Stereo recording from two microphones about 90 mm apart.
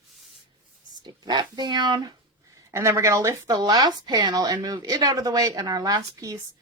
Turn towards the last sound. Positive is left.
turn(degrees=-45)  # may be behind; listen again after turning